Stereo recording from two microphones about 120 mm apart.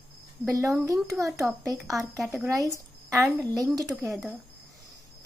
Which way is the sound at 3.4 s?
30° right (ahead or behind).